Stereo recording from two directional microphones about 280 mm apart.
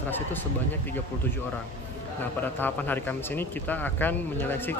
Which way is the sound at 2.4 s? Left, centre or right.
Centre.